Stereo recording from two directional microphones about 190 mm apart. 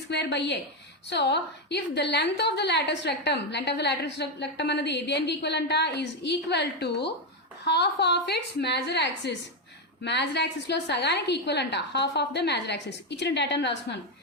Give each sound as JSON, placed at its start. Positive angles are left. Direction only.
{"t": 0.1, "sound": "a woman's voice", "side_deg": 65}